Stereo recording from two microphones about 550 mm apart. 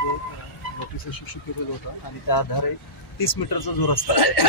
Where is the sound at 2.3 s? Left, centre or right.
Left.